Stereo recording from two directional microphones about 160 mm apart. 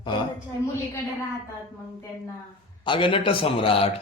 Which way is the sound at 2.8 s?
30° left (ahead or behind).